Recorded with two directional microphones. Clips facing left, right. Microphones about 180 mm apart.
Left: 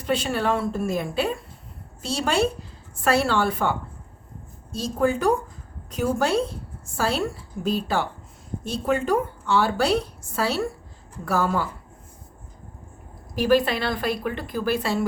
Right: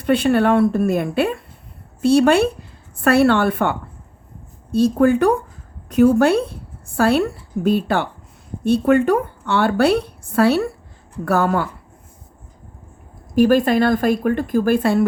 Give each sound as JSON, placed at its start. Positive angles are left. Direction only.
{"t": 0.0, "sound": "a woman's voice", "side_deg": -60}
{"t": 13.3, "sound": "speech", "side_deg": -50}